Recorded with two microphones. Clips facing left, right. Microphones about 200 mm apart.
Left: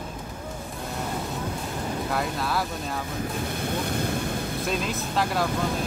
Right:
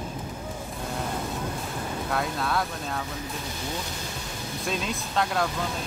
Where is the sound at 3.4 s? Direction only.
55° left (ahead or behind).